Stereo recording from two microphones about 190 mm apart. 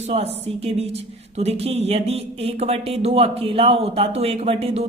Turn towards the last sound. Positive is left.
turn(degrees=-30)  # may be behind; listen again after turning